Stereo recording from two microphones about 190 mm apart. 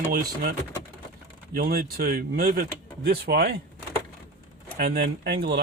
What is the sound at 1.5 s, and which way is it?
Speech, 50° right (ahead or behind).